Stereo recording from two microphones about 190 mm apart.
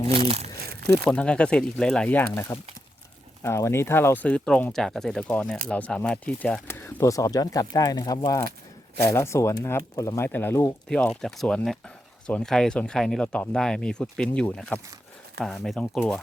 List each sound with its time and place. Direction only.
0.1 s speech: 35° right (ahead or behind)
0.9 s speech: 5° left (ahead or behind)